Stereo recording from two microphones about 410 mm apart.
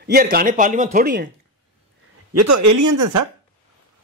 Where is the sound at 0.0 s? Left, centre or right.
Right.